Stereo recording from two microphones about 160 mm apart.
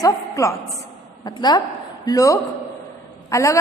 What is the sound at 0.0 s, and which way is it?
A woman's voice, 20° left (ahead or behind).